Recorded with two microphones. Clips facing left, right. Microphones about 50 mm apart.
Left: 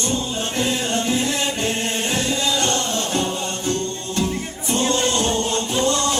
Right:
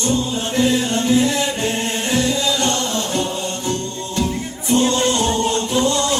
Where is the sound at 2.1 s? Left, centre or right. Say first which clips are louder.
Right 5 dB; left.